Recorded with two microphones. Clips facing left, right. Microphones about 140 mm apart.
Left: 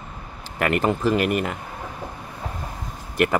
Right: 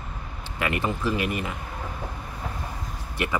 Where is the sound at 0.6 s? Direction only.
50° left (ahead or behind).